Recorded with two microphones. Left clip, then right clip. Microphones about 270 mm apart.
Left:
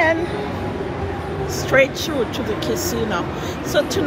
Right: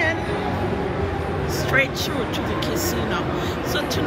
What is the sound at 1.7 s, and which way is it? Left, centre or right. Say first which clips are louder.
Speech: left 5 dB; centre.